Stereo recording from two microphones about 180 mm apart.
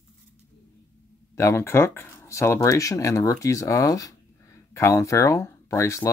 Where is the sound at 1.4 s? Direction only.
15° left (ahead or behind).